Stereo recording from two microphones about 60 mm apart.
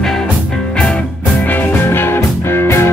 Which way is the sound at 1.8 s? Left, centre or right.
Left.